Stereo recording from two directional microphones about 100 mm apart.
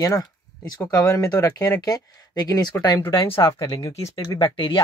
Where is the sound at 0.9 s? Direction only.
30° left (ahead or behind).